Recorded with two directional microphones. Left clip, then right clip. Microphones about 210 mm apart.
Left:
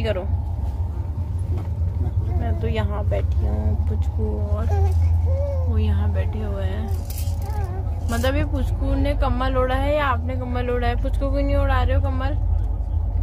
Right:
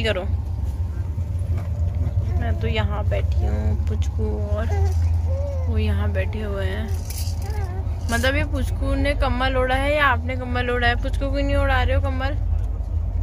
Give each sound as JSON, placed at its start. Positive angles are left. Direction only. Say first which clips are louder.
{"t": 0.0, "sound": "speech", "louder": "right 2 dB", "side_deg": 5}
{"t": 2.4, "sound": "speech", "louder": "right 1 dB", "side_deg": 10}
{"t": 5.8, "sound": "speech", "louder": "right 3 dB", "side_deg": -5}
{"t": 8.1, "sound": "speech", "louder": "right 2 dB", "side_deg": -5}